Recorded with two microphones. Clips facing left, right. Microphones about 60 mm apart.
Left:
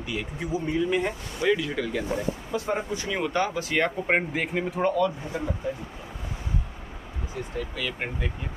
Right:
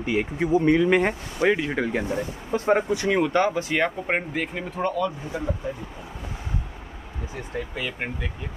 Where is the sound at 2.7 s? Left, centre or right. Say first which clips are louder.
Right 7 dB; right.